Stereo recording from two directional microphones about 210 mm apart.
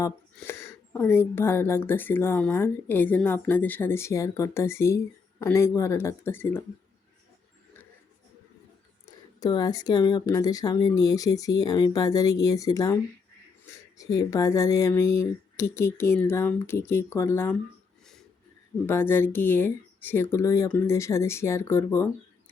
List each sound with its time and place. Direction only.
0.3 s speech: 10° left (ahead or behind)
9.0 s speech: 20° left (ahead or behind)
14.0 s speech: 15° left (ahead or behind)
18.0 s wheeze: centre (ahead or behind)
18.9 s speech: 10° left (ahead or behind)